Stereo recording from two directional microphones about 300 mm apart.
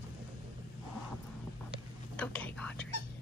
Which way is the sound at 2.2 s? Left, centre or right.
Centre.